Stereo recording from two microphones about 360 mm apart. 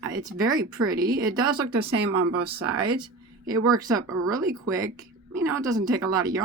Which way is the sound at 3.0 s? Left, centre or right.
Centre.